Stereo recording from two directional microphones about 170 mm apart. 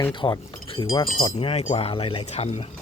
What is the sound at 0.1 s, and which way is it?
Speech, 30° left (ahead or behind).